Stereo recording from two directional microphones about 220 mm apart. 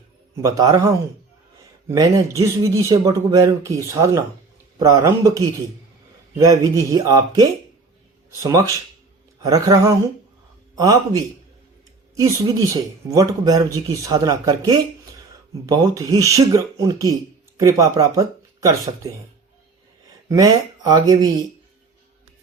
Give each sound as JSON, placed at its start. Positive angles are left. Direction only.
{"t": 0.4, "sound": "speech", "side_deg": -15}
{"t": 6.4, "sound": "speech", "side_deg": -15}
{"t": 20.2, "sound": "speech", "side_deg": -15}